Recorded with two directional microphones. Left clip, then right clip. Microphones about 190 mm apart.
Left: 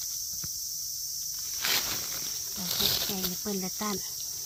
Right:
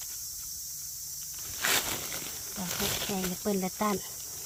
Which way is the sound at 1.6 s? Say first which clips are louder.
Right 1 dB; 50° right (ahead or behind).